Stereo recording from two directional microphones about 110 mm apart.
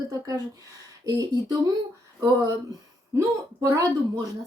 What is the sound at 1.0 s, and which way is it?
Speech, 35° right (ahead or behind).